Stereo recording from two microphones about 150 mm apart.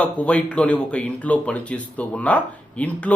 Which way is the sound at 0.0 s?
10° left (ahead or behind).